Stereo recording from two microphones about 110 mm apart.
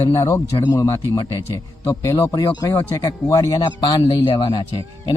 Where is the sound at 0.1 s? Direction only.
30° left (ahead or behind).